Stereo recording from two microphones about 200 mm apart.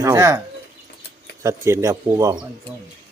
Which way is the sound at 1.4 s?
15° right (ahead or behind).